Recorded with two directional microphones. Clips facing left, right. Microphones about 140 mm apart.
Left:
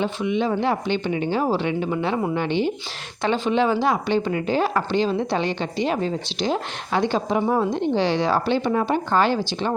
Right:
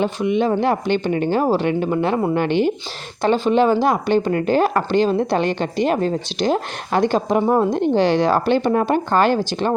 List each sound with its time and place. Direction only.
0.0 s speech: 50° right (ahead or behind)
3.2 s speech: 40° right (ahead or behind)
7.4 s a woman's voice: 35° right (ahead or behind)
7.7 s speech: 50° right (ahead or behind)